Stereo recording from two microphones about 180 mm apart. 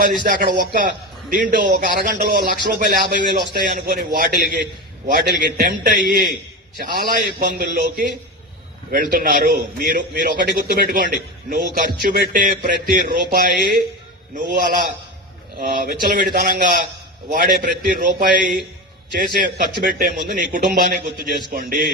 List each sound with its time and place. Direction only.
0.3 s a man's voice: 55° right (ahead or behind)